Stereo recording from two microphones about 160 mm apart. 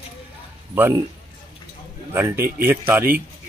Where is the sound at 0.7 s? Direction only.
15° right (ahead or behind).